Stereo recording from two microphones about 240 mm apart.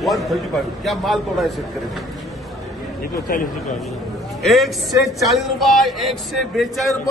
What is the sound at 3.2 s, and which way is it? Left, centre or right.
Speech, left.